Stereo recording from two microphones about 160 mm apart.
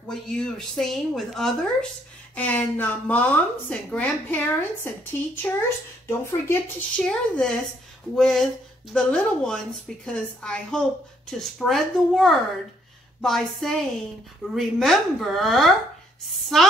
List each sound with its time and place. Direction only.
0.1 s a woman's voice: 5° left (ahead or behind)